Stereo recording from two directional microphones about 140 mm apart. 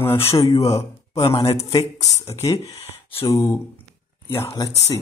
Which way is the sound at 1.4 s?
45° left (ahead or behind).